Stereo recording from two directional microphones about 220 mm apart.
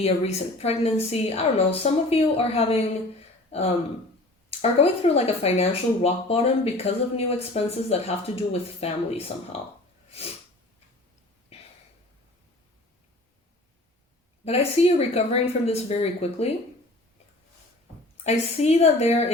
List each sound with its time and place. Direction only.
0.0 s speech: 30° left (ahead or behind)
4.8 s speech: 30° left (ahead or behind)
14.4 s speech: 30° left (ahead or behind)
18.2 s speech: 30° left (ahead or behind)